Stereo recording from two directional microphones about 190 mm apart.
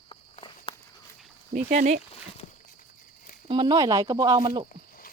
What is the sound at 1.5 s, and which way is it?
Speech, 45° right (ahead or behind).